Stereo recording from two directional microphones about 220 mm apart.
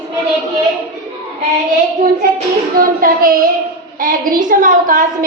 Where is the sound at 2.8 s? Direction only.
40° right (ahead or behind).